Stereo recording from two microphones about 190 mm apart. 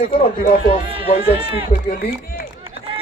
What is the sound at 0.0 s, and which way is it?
Speech, 50° left (ahead or behind).